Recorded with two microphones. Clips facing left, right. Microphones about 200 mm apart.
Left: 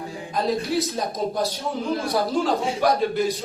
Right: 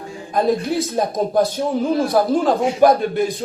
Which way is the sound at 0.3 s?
50° right (ahead or behind).